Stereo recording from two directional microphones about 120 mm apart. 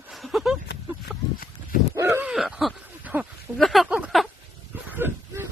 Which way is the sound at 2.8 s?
15° right (ahead or behind).